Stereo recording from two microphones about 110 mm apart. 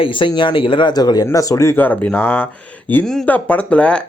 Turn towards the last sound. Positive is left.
turn(degrees=10)  # may be behind; listen again after turning